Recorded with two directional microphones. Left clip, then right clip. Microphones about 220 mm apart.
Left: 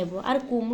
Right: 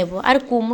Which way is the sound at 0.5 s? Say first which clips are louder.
Right 8 dB; 40° right (ahead or behind).